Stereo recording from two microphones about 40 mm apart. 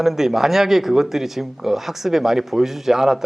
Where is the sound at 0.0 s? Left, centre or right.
Centre.